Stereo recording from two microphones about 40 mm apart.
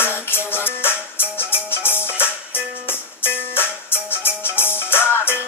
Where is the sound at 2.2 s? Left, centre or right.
Left.